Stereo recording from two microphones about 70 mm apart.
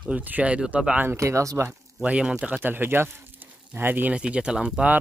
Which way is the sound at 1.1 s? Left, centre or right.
Right.